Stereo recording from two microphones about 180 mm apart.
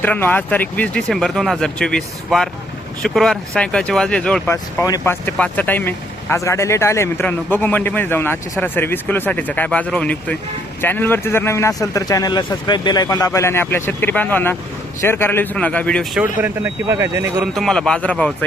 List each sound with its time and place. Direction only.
0.0 s speech: 10° left (ahead or behind)
4.5 s speech: 15° left (ahead or behind)
16.1 s speech: 10° right (ahead or behind)
17.4 s speech: centre (ahead or behind)